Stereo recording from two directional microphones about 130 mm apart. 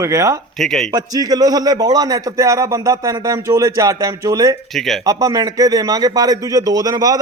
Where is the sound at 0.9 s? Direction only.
30° right (ahead or behind).